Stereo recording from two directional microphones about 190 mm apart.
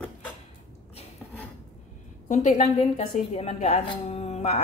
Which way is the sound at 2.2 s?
40° left (ahead or behind).